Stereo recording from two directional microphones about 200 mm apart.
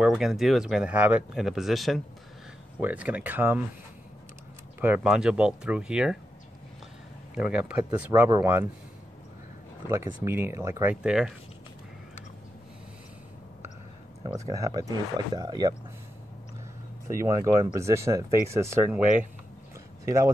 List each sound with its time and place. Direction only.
0.0 s speech: 5° right (ahead or behind)
4.7 s speech: 10° right (ahead or behind)
7.3 s speech: 5° right (ahead or behind)
9.8 s speech: 15° right (ahead or behind)
14.2 s speech: 15° right (ahead or behind)
17.1 s speech: 15° right (ahead or behind)